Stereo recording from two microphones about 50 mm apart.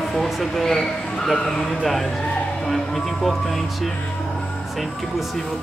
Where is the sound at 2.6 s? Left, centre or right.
Centre.